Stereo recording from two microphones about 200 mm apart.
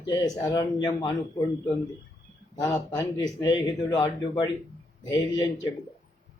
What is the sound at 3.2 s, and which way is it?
A man's voice, 20° left (ahead or behind).